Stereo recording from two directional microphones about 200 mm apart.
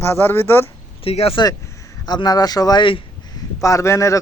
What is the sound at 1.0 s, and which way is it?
A man's voice, 30° left (ahead or behind).